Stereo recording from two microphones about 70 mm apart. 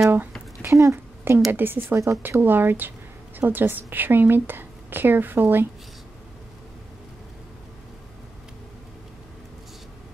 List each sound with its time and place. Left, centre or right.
0.7 s speech: right
0.9 s a sound: right
1.5 s a woman's voice: right